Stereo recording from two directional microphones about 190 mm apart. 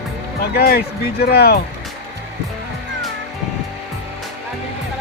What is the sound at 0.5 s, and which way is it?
Speech, 55° left (ahead or behind).